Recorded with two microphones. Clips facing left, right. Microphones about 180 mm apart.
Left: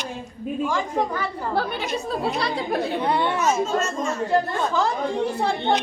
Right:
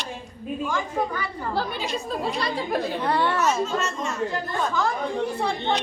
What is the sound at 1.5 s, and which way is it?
A woman's voice, 60° left (ahead or behind).